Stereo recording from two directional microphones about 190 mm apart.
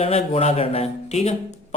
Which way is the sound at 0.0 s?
30° left (ahead or behind).